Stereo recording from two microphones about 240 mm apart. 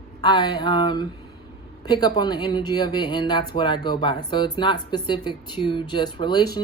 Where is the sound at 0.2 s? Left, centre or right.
Centre.